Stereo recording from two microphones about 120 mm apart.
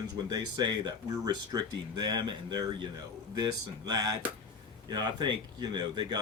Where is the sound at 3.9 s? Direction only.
35° right (ahead or behind).